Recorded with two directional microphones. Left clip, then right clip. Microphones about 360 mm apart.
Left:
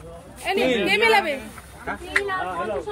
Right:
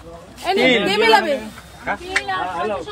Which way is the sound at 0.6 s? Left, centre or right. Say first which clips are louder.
Right 6 dB; right.